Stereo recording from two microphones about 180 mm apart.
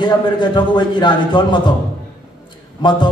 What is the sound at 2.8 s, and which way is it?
Speech, 25° left (ahead or behind).